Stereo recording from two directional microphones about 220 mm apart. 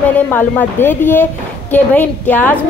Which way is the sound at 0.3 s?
10° left (ahead or behind).